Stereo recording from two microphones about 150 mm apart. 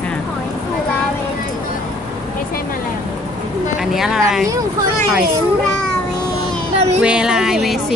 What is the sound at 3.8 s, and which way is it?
Speech, centre (ahead or behind).